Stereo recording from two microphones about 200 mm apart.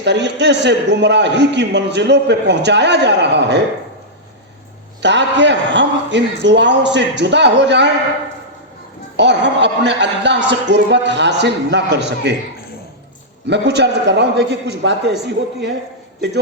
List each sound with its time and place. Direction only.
0.0 s a man's voice: 60° right (ahead or behind)
5.0 s a man's voice: 60° right (ahead or behind)
9.1 s a man's voice: 60° right (ahead or behind)
13.5 s a man's voice: 60° right (ahead or behind)